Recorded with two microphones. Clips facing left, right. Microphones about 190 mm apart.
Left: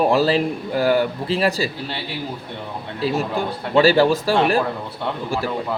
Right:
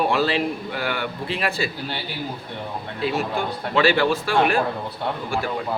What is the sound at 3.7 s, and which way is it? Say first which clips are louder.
Speech: left 5 dB; 40° left (ahead or behind).